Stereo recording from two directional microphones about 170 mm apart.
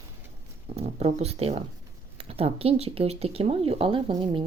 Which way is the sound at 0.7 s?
40° right (ahead or behind).